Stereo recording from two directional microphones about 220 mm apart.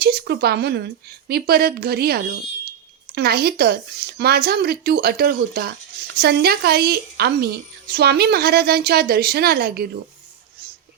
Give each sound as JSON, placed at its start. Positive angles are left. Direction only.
{"t": 0.0, "sound": "a woman's voice", "side_deg": -45}